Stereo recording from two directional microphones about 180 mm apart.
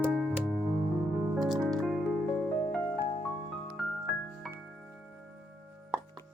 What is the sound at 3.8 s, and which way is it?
Music, centre (ahead or behind).